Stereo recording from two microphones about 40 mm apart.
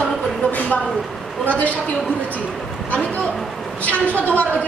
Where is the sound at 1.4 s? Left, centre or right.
Left.